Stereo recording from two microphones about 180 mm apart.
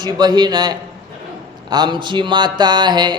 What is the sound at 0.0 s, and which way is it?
A man's voice, 25° right (ahead or behind).